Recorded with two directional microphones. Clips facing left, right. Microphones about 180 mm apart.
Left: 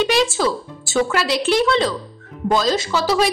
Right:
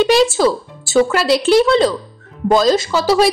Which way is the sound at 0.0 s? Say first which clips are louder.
Right 5 dB; 35° right (ahead or behind).